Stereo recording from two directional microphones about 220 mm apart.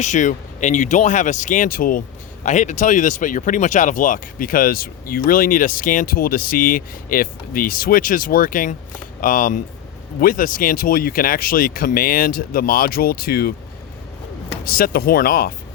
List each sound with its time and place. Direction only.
0.0 s speech: 35° left (ahead or behind)
14.6 s speech: 40° left (ahead or behind)